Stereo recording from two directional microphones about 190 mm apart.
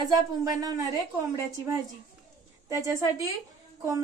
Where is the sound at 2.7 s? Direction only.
15° right (ahead or behind).